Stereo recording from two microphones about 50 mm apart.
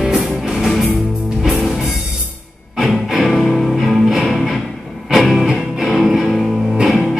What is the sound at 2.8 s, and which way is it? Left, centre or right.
Music, centre.